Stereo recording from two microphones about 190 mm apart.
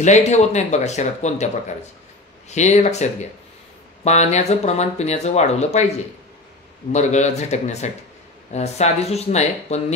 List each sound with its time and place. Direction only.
0.0 s speech: 40° left (ahead or behind)
2.5 s speech: 35° left (ahead or behind)
6.9 s speech: 35° left (ahead or behind)